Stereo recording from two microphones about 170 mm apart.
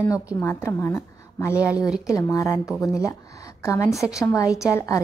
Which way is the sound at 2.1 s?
20° left (ahead or behind).